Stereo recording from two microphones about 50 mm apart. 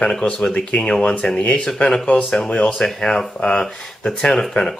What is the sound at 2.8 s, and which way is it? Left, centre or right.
Speech, centre.